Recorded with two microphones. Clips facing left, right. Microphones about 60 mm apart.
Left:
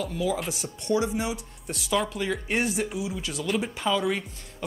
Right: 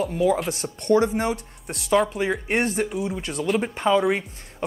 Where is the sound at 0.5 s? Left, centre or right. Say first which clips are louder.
Right 6 dB; right.